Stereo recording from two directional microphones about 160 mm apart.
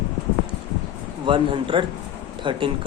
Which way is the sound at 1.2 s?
30° right (ahead or behind).